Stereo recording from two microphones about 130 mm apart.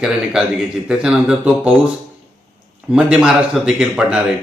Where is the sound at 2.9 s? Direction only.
5° right (ahead or behind).